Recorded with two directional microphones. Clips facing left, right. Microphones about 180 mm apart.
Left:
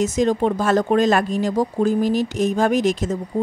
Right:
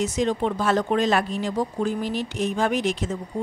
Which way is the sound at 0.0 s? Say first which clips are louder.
Left 5 dB; 45° left (ahead or behind).